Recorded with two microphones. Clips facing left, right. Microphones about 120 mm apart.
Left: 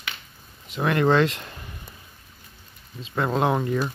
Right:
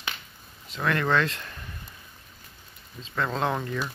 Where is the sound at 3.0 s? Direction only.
15° left (ahead or behind).